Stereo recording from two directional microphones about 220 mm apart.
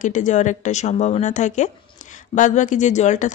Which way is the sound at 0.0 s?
35° left (ahead or behind).